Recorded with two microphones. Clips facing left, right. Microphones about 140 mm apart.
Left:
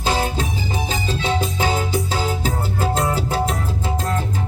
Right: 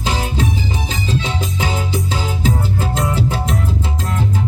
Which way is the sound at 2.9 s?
35° left (ahead or behind).